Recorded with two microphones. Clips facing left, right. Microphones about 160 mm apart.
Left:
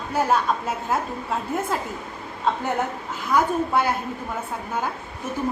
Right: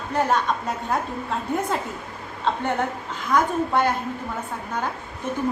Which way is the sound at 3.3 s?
5° left (ahead or behind).